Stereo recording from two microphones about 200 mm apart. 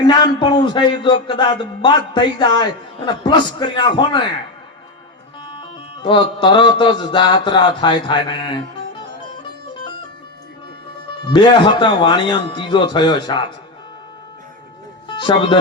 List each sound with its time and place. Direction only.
0.0 s a man's voice: 20° left (ahead or behind)
5.5 s music: 25° left (ahead or behind)
7.0 s a man's voice: 25° left (ahead or behind)
11.3 s a man's voice: 25° left (ahead or behind)
15.0 s speech: 25° left (ahead or behind)